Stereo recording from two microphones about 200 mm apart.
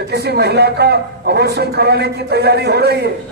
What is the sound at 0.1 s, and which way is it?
A man's voice, 55° right (ahead or behind).